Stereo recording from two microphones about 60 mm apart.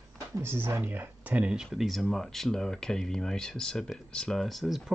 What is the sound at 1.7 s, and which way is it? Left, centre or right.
Speech, centre.